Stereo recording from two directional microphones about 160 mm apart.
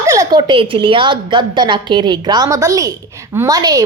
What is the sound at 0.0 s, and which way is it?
A woman's voice, 20° right (ahead or behind).